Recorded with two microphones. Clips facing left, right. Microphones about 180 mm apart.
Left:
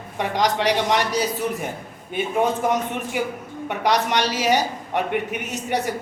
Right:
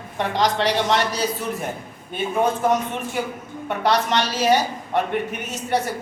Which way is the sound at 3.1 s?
15° left (ahead or behind).